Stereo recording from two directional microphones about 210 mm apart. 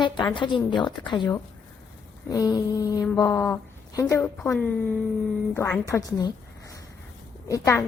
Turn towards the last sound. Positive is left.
turn(degrees=15)  # may be behind; listen again after turning